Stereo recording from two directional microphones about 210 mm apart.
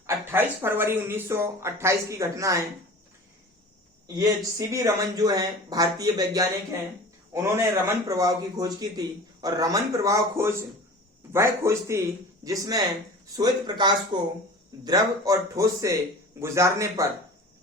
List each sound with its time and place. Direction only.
0.3 s a man's voice: 10° right (ahead or behind)
4.0 s a man's voice: 20° right (ahead or behind)